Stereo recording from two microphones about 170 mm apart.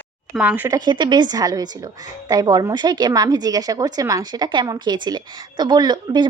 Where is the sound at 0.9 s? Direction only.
25° right (ahead or behind).